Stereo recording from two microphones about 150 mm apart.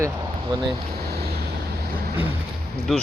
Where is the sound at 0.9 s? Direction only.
90° right.